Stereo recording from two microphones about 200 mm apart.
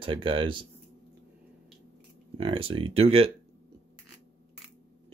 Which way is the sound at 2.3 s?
25° right (ahead or behind).